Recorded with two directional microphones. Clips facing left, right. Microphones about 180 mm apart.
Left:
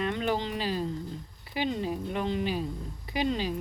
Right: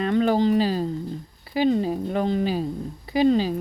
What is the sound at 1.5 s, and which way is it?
Speech, 40° right (ahead or behind).